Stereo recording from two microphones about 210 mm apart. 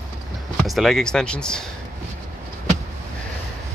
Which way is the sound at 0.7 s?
Centre (ahead or behind).